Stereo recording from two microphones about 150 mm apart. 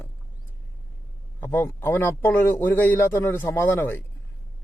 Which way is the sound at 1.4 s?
15° left (ahead or behind).